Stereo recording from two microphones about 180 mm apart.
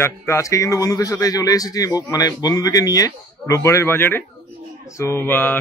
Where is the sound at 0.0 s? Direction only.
15° left (ahead or behind).